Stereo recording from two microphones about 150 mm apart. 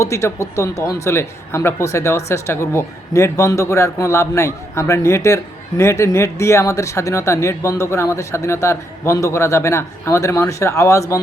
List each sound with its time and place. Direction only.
0.0 s a man's voice: 20° left (ahead or behind)